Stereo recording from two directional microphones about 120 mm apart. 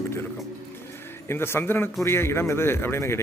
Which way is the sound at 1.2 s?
20° left (ahead or behind).